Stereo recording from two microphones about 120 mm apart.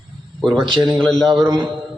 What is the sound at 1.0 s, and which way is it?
Speech, 5° left (ahead or behind).